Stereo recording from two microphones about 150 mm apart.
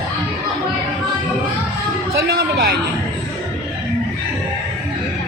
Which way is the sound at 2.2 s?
90° right.